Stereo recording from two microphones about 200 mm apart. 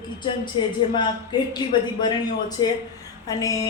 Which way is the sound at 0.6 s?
25° left (ahead or behind).